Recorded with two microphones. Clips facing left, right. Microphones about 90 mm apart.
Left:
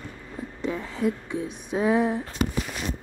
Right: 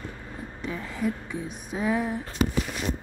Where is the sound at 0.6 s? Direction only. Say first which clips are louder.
Left 3 dB; 20° left (ahead or behind).